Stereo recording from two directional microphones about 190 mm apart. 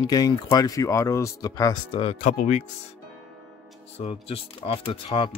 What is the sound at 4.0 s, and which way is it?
Speech, 30° left (ahead or behind).